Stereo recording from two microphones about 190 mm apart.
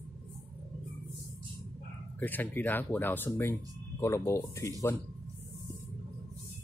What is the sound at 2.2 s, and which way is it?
Speech, 10° left (ahead or behind).